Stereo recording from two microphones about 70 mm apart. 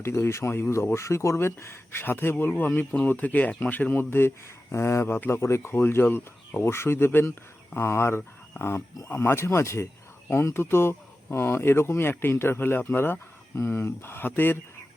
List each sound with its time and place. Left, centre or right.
0.0 s speech: left
5.4 s speech: left